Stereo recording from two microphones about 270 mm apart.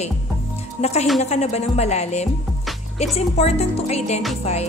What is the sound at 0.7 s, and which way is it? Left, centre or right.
Speech, left.